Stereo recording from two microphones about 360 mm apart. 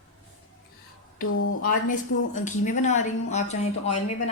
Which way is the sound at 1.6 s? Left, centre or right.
Left.